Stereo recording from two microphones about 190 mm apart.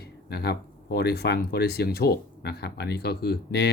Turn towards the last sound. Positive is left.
turn(degrees=60)  # may be behind; listen again after turning